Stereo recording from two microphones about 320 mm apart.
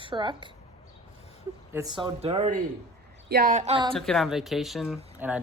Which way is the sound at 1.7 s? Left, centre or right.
Centre.